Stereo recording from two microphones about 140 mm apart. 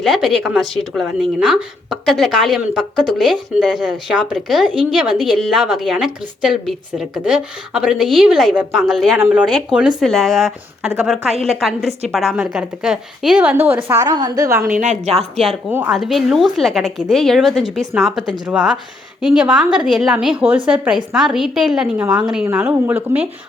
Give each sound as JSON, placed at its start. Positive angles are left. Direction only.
{"t": 0.0, "sound": "a woman's voice", "side_deg": 0}
{"t": 14.8, "sound": "a woman's voice", "side_deg": -55}
{"t": 15.2, "sound": "speech", "side_deg": 0}